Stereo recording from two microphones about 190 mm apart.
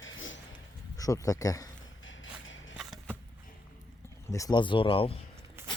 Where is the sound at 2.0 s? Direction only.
90° left.